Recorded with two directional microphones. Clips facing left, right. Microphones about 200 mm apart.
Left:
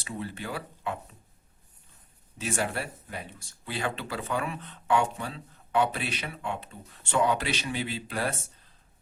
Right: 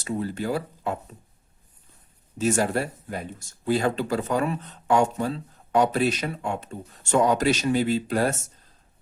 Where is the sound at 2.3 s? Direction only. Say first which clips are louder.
Right 8 dB; 40° right (ahead or behind).